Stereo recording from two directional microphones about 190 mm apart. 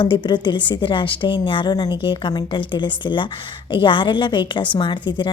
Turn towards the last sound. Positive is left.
turn(degrees=25)  # may be behind; listen again after turning